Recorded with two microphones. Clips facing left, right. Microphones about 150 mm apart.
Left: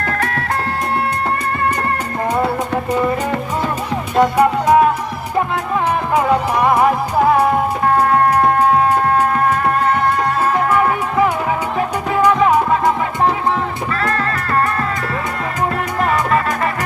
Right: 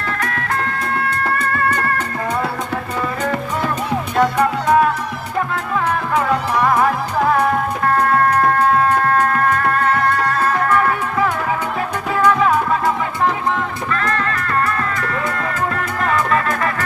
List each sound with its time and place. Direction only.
0.2 s music: 35° left (ahead or behind)
1.4 s music: 15° left (ahead or behind)
4.2 s music: 15° left (ahead or behind)
6.1 s music: 15° left (ahead or behind)
14.1 s music: 35° left (ahead or behind)
16.0 s music: 25° left (ahead or behind)